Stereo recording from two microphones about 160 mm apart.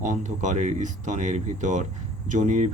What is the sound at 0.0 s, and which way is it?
Speech, 50° right (ahead or behind).